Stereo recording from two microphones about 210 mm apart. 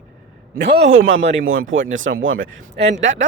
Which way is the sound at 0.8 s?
65° right (ahead or behind).